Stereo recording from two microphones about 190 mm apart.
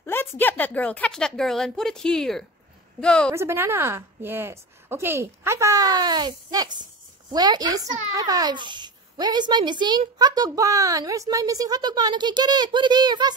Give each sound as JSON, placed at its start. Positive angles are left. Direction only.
{"t": 0.0, "sound": "a sound", "side_deg": 10}
{"t": 0.4, "sound": "speech", "side_deg": 10}
{"t": 3.3, "sound": "a woman's voice", "side_deg": -15}